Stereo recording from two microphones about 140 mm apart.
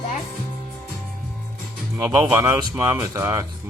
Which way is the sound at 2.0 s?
20° right (ahead or behind).